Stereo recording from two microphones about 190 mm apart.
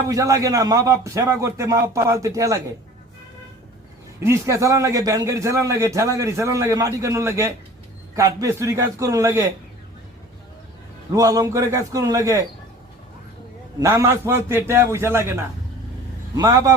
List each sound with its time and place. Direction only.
0.1 s a man's voice: 15° right (ahead or behind)
4.2 s a man's voice: 15° right (ahead or behind)
11.1 s a man's voice: 20° right (ahead or behind)
13.7 s a man's voice: 20° right (ahead or behind)